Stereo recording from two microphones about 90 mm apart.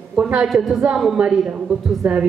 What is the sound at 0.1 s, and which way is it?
A woman's voice, 10° right (ahead or behind).